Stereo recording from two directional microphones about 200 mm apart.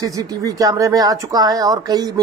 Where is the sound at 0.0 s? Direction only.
15° right (ahead or behind).